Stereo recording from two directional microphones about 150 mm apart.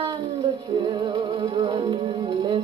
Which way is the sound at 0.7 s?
30° right (ahead or behind).